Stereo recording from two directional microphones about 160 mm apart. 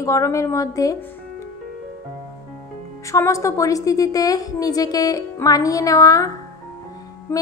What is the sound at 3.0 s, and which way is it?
A woman's voice, 20° left (ahead or behind).